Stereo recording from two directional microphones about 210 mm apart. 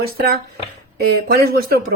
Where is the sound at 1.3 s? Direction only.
50° right (ahead or behind).